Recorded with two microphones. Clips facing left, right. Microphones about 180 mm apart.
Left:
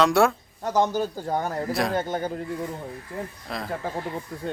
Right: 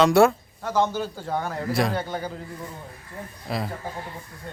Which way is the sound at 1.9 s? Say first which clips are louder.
Left 3 dB; 50° left (ahead or behind).